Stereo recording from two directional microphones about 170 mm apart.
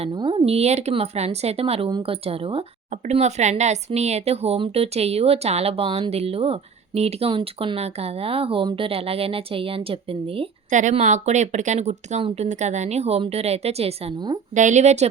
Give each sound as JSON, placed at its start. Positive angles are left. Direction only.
{"t": 0.0, "sound": "speech", "side_deg": -30}
{"t": 10.7, "sound": "speech", "side_deg": -45}